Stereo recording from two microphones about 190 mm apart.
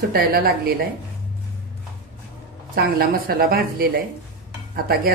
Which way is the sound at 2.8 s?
50° right (ahead or behind).